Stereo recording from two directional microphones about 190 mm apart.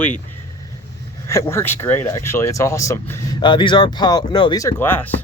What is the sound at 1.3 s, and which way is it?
Speech, 15° left (ahead or behind).